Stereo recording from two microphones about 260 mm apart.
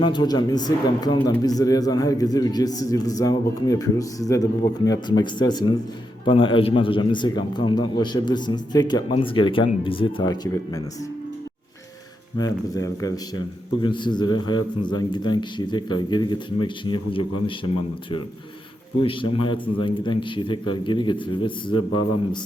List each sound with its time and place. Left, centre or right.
0.0 s speech: centre
12.4 s speech: centre
19.0 s a man's voice: centre